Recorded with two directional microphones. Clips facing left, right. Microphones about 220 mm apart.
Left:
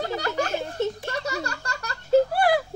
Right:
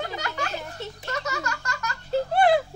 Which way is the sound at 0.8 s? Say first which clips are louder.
Left 11 dB; 50° left (ahead or behind).